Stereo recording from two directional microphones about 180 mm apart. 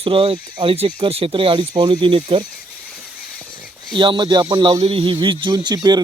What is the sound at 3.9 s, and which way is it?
Speech, 25° right (ahead or behind).